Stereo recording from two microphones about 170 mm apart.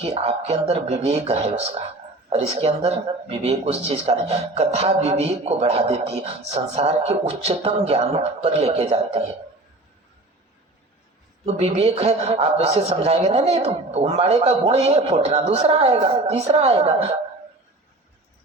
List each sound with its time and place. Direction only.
0.0 s speech: 35° right (ahead or behind)
11.4 s speech: 35° right (ahead or behind)